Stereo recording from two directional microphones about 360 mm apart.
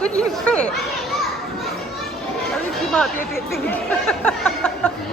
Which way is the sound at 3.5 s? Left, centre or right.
Centre.